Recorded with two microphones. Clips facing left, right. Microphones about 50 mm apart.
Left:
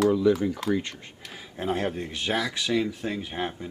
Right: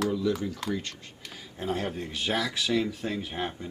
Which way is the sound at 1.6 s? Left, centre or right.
Left.